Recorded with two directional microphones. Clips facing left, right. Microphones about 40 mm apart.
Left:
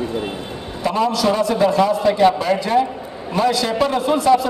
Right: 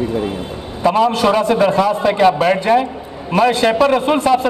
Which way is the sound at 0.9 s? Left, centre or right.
Right.